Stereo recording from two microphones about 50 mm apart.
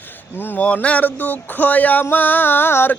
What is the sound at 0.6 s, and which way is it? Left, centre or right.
Male singing, left.